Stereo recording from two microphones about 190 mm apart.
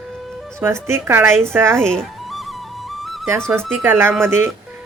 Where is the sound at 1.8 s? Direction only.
5° left (ahead or behind).